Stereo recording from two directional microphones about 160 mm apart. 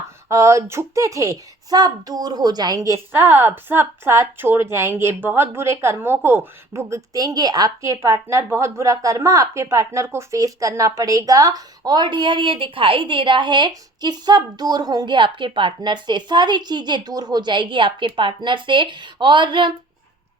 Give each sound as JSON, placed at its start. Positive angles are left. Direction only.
{"t": 0.3, "sound": "speech", "side_deg": -20}